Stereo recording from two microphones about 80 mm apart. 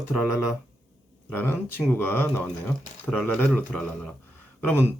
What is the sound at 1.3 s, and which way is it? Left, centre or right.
Speech, left.